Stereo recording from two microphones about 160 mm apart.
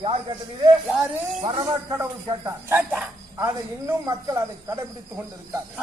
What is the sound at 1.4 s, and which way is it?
Speech, 25° right (ahead or behind).